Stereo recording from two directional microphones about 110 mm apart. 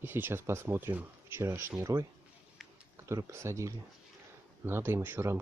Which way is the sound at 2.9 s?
25° right (ahead or behind).